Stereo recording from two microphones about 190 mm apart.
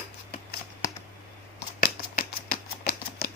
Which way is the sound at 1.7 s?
50° left (ahead or behind).